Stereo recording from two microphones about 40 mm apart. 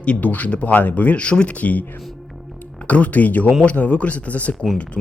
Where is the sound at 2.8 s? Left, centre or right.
Left.